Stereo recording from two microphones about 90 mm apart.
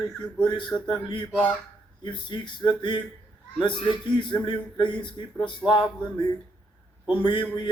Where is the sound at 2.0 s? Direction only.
60° left (ahead or behind).